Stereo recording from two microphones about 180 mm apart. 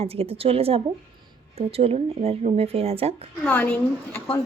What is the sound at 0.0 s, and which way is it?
Speech, 35° right (ahead or behind).